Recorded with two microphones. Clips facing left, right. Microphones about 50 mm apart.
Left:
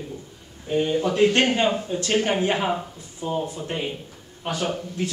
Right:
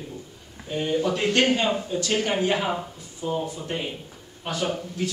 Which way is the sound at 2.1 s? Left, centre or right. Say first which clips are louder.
Left 2 dB; centre.